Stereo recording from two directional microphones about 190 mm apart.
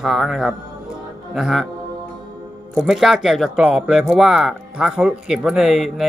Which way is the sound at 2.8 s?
Centre (ahead or behind).